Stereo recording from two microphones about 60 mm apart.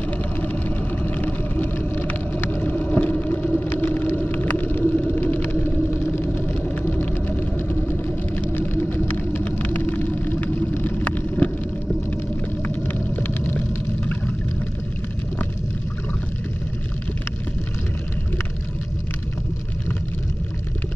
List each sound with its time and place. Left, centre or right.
0.4 s vehicle: left
3.5 s a sound: left
6.1 s vehicle: left
11.1 s vehicle: left